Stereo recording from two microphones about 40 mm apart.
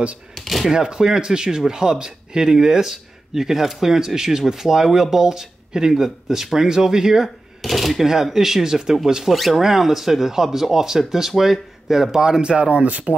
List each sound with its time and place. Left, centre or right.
0.3 s speech: centre
0.7 s speech: centre
7.6 s speech: centre
12.5 s speech: right